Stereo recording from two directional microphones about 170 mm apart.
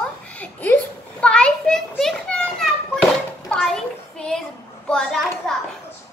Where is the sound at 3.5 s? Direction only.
Centre (ahead or behind).